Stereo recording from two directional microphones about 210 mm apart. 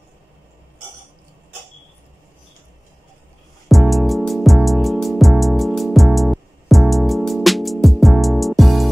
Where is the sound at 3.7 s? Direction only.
Centre (ahead or behind).